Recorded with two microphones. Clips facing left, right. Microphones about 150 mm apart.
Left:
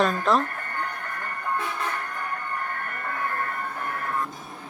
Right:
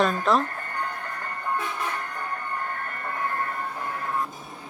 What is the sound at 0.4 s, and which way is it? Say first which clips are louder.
Music: even; 25° right (ahead or behind).